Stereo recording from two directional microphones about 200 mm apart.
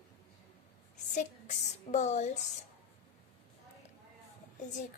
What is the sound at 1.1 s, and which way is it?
Speech, 35° left (ahead or behind).